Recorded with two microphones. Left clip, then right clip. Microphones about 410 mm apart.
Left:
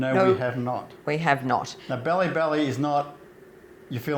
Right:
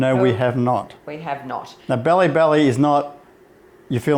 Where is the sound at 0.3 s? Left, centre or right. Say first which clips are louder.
Right 5 dB; right.